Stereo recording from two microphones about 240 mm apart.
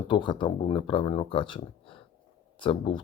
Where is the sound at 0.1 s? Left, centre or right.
Centre.